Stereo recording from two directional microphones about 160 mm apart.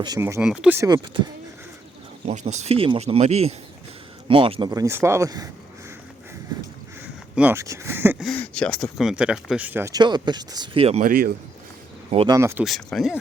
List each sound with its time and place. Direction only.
0.2 s speech: 15° right (ahead or behind)
0.4 s speech: 5° right (ahead or behind)
0.8 s speech: 25° right (ahead or behind)
2.2 s speech: 45° right (ahead or behind)
4.7 s speech: 20° right (ahead or behind)
7.0 s speech: 10° right (ahead or behind)
8.2 s speech: 5° left (ahead or behind); by 10.0 s 15° right (ahead or behind)
10.0 s speech: 25° right (ahead or behind)
11.0 s a man's voice: 65° right (ahead or behind)
12.3 s speech: 15° right (ahead or behind)
12.6 s speech: centre (ahead or behind)